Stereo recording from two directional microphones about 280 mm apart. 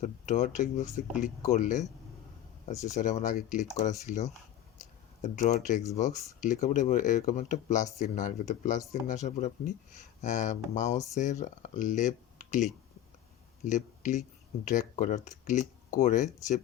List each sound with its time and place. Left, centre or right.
0.0 s speech: left
3.0 s speech: left
4.8 s a sound: left
6.0 s speech: left